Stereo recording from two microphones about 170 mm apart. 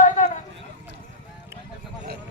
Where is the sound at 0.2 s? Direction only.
50° left (ahead or behind).